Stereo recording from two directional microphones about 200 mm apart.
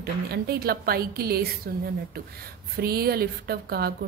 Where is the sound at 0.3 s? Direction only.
50° right (ahead or behind).